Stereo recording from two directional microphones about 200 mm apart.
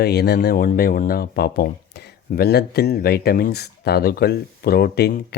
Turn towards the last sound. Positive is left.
turn(degrees=50)  # may be behind; listen again after turning